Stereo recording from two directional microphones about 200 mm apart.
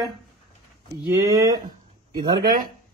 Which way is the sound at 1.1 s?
15° right (ahead or behind).